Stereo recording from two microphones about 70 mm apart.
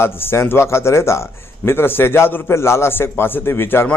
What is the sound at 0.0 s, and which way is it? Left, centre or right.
Speech, left.